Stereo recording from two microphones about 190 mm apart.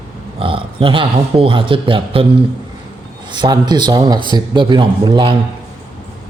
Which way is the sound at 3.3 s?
20° right (ahead or behind).